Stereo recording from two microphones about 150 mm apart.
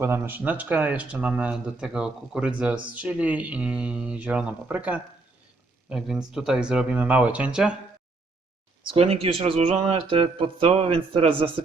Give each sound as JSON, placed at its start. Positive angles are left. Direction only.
{"t": 0.0, "sound": "speech", "side_deg": -15}
{"t": 8.8, "sound": "speech", "side_deg": -40}